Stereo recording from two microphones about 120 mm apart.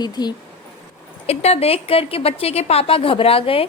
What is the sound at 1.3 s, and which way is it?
A woman's voice, 60° left (ahead or behind).